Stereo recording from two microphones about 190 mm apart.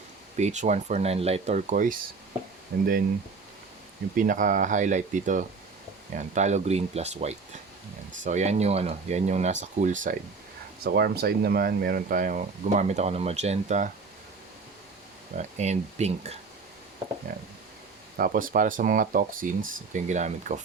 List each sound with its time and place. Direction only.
0.3 s speech: 40° right (ahead or behind)
2.7 s speech: 55° right (ahead or behind)
4.1 s speech: 45° right (ahead or behind)
10.8 s speech: 55° right (ahead or behind); by 13.9 s 40° right (ahead or behind)
15.4 s speech: 35° right (ahead or behind)
18.2 s speech: 45° right (ahead or behind)